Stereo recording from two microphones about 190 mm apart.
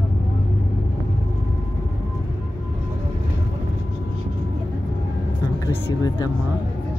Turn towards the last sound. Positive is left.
turn(degrees=20)  # may be behind; listen again after turning